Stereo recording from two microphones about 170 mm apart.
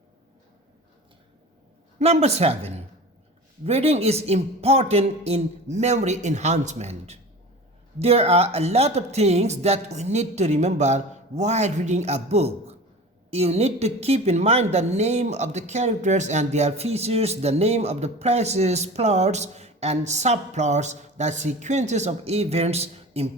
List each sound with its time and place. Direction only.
2.0 s a woman's voice: 40° right (ahead or behind)